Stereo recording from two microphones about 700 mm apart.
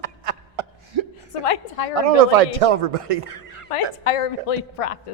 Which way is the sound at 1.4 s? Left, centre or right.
Left.